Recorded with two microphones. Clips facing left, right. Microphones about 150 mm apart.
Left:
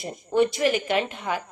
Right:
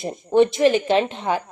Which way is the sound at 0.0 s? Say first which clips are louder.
Right 5 dB; 25° right (ahead or behind).